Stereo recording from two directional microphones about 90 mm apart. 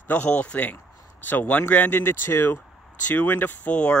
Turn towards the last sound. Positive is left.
turn(degrees=15)  # may be behind; listen again after turning